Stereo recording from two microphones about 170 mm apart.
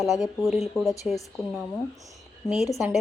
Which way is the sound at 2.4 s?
5° right (ahead or behind).